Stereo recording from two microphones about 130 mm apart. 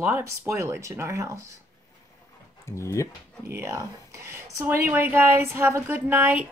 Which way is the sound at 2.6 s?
20° left (ahead or behind).